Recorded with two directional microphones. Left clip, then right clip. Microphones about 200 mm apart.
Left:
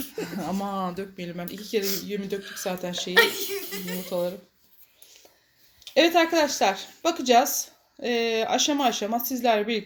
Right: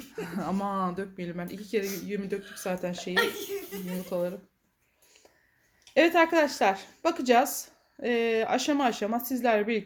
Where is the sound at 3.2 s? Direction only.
10° left (ahead or behind).